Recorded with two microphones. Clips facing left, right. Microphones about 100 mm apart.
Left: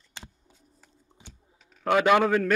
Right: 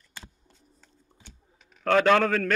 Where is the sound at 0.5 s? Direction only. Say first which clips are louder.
Even; 5° left (ahead or behind).